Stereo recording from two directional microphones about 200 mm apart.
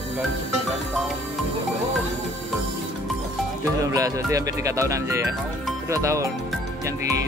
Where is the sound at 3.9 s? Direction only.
15° right (ahead or behind).